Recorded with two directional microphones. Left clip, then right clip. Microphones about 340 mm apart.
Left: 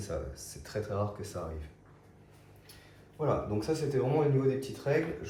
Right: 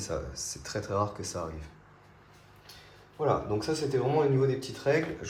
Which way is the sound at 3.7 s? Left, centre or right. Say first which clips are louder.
Right 2 dB; right.